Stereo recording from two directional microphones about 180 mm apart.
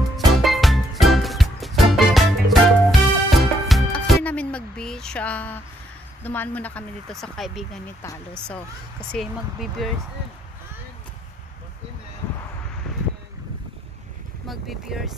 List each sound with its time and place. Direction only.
0.2 s music: centre (ahead or behind)
6.2 s speech: 10° left (ahead or behind)
9.1 s speech: centre (ahead or behind)
14.5 s speech: centre (ahead or behind)